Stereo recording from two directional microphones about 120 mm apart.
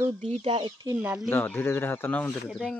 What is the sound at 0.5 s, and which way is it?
Speech, 35° right (ahead or behind).